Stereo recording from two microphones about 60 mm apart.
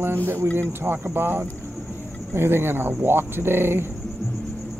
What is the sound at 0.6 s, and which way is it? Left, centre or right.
Speech, right.